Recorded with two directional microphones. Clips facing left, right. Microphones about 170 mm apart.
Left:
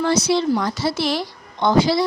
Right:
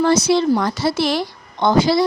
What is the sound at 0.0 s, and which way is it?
Speech, 45° right (ahead or behind).